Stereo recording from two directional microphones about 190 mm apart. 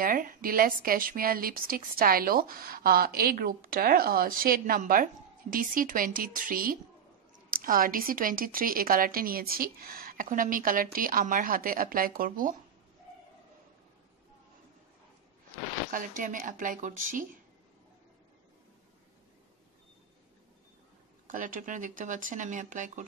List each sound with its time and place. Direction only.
0.0 s speech: 45° right (ahead or behind)
16.2 s speech: 45° right (ahead or behind)
21.3 s speech: 45° right (ahead or behind)